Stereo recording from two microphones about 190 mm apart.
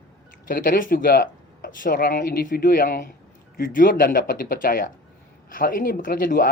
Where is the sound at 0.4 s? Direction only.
45° left (ahead or behind).